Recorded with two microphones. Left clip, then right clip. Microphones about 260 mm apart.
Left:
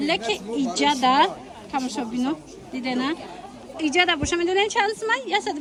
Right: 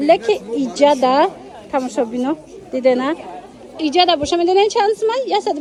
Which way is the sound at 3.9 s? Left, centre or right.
Centre.